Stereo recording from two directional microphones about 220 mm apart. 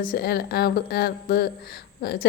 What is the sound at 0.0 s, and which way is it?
Speech, 45° left (ahead or behind).